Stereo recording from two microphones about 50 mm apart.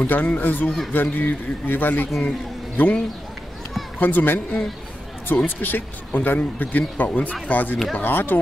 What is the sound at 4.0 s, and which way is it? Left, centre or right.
Speech, left.